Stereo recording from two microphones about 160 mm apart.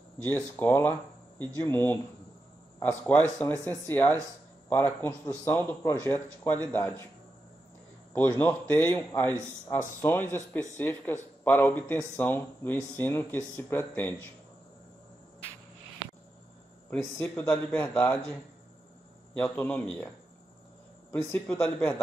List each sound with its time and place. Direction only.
0.2 s speech: 10° left (ahead or behind)
8.4 s speech: 10° left (ahead or behind)
16.9 s speech: centre (ahead or behind)
19.4 s speech: 10° left (ahead or behind)
21.1 s speech: 15° left (ahead or behind)